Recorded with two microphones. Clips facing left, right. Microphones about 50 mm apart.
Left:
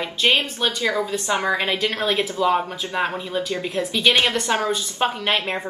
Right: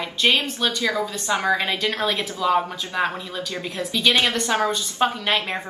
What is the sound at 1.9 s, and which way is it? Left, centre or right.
A woman's voice, centre.